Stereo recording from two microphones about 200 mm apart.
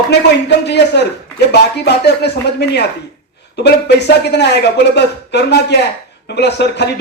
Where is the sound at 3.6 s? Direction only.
55° left (ahead or behind).